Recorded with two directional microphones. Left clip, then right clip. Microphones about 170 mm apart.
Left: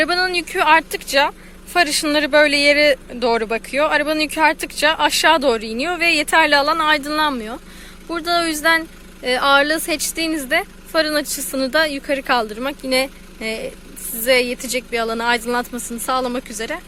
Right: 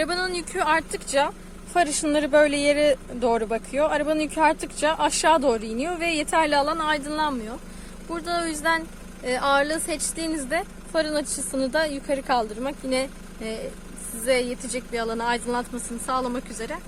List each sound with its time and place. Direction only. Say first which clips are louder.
0.0 s a woman's voice: left 8 dB; 25° left (ahead or behind)